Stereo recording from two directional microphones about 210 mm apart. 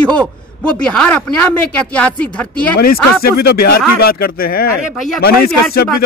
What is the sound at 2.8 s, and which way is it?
Speech, 45° left (ahead or behind).